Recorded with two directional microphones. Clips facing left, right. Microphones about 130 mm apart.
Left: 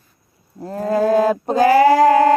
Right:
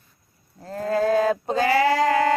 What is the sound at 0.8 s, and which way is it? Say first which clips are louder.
Male singing: left 5 dB; 40° left (ahead or behind).